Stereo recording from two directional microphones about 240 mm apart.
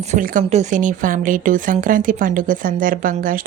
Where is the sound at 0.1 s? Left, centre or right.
Right.